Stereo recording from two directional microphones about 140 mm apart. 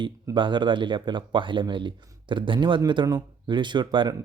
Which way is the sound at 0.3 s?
35° right (ahead or behind).